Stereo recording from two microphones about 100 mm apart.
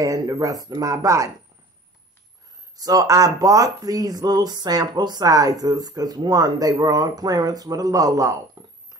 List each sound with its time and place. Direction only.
0.0 s speech: 35° right (ahead or behind)
2.8 s speech: 40° right (ahead or behind)
8.6 s a sound: 40° right (ahead or behind)